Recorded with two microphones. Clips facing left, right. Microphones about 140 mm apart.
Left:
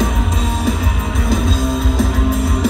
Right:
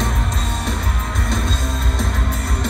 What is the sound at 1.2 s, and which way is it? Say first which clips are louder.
Music: left 8 dB; centre (ahead or behind).